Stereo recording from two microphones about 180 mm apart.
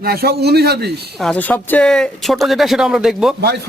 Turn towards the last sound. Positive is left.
turn(degrees=0)  # may be behind; listen again after turning